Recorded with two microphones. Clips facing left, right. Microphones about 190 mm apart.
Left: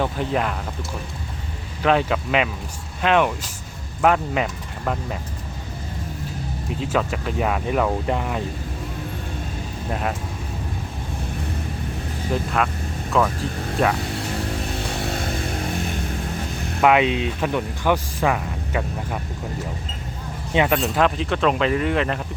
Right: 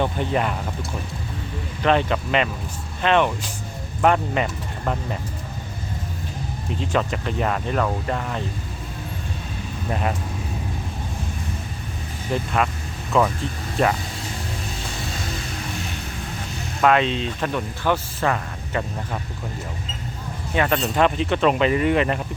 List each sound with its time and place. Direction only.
0.0 s speech: centre (ahead or behind)
1.8 s speech: 5° left (ahead or behind)
6.7 s speech: 5° left (ahead or behind)
9.9 s speech: centre (ahead or behind)
12.3 s speech: centre (ahead or behind)
14.9 s music: 60° left (ahead or behind)
16.8 s speech: 15° left (ahead or behind)
20.5 s speech: 20° left (ahead or behind)
20.7 s speech: centre (ahead or behind)